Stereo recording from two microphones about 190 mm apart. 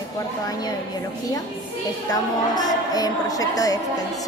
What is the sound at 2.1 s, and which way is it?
A woman's voice, 20° left (ahead or behind).